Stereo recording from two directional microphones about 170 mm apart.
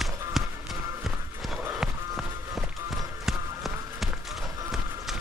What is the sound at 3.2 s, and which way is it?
Run, centre (ahead or behind).